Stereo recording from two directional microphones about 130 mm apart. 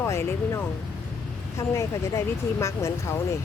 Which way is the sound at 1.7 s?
20° left (ahead or behind).